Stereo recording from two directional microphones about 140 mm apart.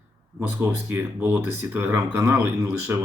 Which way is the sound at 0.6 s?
15° right (ahead or behind).